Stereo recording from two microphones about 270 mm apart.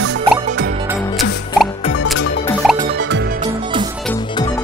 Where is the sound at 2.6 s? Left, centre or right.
Centre.